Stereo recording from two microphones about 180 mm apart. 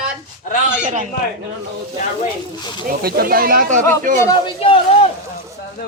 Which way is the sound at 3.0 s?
55° right (ahead or behind).